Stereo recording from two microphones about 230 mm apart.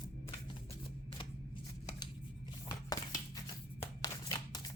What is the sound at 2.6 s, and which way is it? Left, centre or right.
Scissors, centre.